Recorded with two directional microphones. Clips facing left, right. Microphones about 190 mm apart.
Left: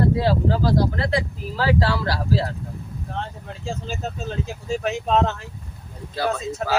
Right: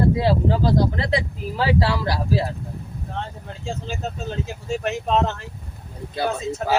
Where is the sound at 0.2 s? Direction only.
20° right (ahead or behind).